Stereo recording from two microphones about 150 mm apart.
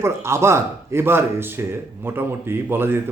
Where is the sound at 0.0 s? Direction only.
15° right (ahead or behind).